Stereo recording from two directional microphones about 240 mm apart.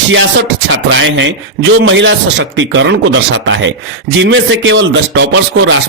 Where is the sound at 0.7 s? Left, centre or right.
Right.